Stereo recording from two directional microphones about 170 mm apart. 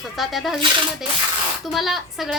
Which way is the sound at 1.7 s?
Centre (ahead or behind).